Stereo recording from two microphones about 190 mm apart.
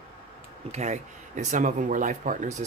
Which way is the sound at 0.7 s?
40° right (ahead or behind).